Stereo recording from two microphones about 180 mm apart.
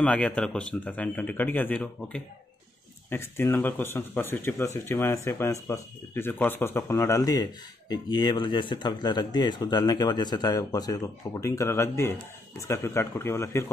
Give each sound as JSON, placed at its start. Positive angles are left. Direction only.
{"t": 0.0, "sound": "speech", "side_deg": 5}